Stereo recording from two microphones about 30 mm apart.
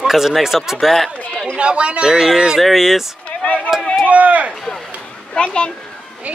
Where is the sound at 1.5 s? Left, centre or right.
Right.